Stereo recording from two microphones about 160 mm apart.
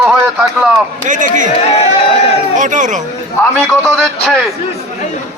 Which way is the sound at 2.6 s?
50° right (ahead or behind).